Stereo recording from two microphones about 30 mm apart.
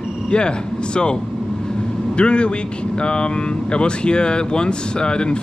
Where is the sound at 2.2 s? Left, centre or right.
Left.